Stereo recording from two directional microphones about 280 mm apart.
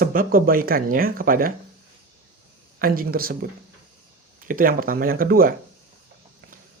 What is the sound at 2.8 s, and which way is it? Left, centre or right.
Speech, right.